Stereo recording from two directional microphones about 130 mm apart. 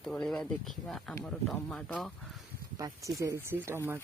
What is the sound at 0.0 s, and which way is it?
Speech, 5° left (ahead or behind).